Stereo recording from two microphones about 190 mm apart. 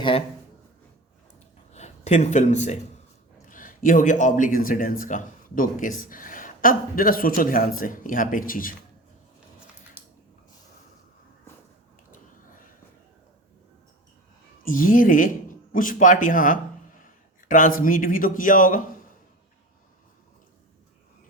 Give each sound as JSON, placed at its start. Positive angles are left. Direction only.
{"t": 1.7, "sound": "a man's voice", "side_deg": 35}
{"t": 10.0, "sound": "a sound", "side_deg": -10}
{"t": 14.6, "sound": "a man's voice", "side_deg": 45}